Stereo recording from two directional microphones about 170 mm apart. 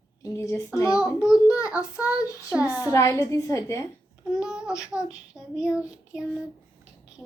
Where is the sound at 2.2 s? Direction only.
20° left (ahead or behind).